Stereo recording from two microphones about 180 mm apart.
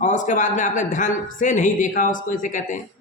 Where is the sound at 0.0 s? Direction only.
45° left (ahead or behind).